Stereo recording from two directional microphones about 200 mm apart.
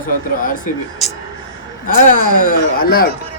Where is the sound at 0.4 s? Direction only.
45° left (ahead or behind).